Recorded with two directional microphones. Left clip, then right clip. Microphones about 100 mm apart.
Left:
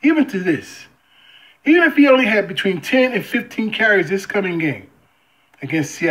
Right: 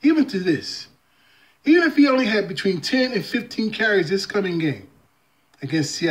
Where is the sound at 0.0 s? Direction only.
25° right (ahead or behind).